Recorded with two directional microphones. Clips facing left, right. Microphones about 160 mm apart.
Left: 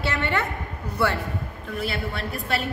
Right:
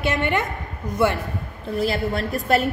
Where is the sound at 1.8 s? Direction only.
40° right (ahead or behind).